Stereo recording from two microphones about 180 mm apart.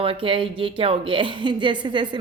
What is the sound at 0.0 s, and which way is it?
Speech, 30° right (ahead or behind).